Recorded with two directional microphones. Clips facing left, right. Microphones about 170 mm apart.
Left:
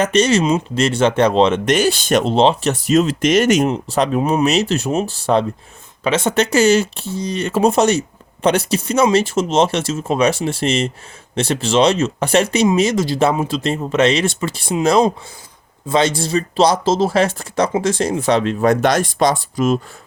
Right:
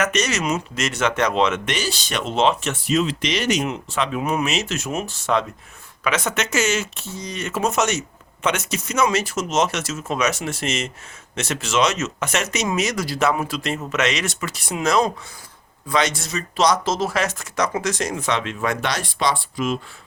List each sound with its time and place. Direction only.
0.0 s speech: 30° left (ahead or behind)
1.7 s speech: 55° left (ahead or behind)
2.2 s speech: 30° left (ahead or behind); by 3.7 s 50° left (ahead or behind)
3.7 s speech: 35° left (ahead or behind)